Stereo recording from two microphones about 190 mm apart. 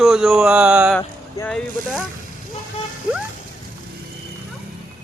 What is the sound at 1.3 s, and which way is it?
Speech, 10° left (ahead or behind).